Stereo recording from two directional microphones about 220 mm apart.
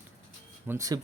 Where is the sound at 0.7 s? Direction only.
15° right (ahead or behind).